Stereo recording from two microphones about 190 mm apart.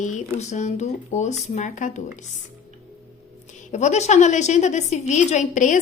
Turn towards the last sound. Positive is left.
turn(degrees=40)  # may be behind; listen again after turning